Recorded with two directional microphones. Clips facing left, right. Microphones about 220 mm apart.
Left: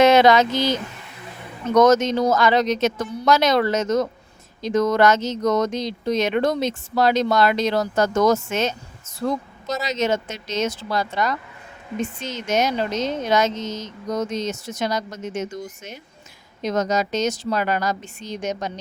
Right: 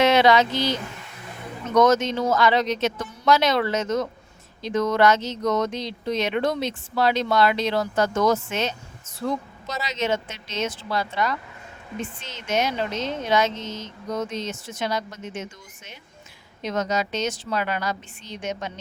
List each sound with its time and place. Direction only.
0.0 s speech: 45° left (ahead or behind)